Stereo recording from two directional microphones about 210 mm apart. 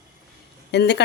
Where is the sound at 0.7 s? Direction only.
55° left (ahead or behind).